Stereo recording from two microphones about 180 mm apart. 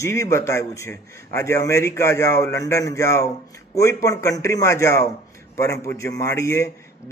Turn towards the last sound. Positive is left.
turn(degrees=15)  # may be behind; listen again after turning